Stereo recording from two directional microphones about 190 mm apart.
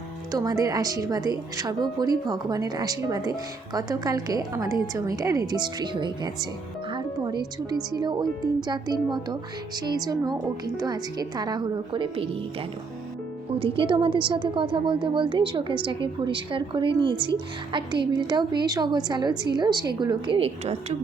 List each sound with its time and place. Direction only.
0.3 s speech: 20° right (ahead or behind)
6.9 s music: 20° right (ahead or behind)
7.9 s speech: 20° right (ahead or behind)
13.5 s speech: 30° right (ahead or behind)